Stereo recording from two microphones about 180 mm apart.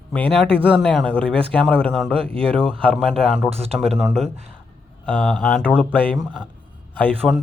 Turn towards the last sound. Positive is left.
turn(degrees=0)  # may be behind; listen again after turning